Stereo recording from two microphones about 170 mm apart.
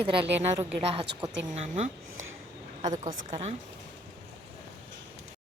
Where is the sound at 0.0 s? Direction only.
30° right (ahead or behind).